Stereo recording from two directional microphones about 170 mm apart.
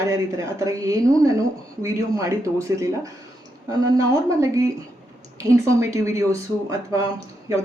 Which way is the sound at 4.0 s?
20° right (ahead or behind).